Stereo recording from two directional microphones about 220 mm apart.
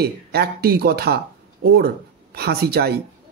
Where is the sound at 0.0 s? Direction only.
45° right (ahead or behind).